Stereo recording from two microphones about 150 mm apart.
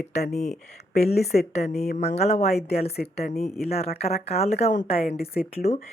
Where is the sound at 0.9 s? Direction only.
45° left (ahead or behind).